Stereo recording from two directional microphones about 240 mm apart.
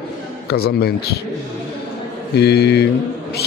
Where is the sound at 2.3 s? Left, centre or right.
Left.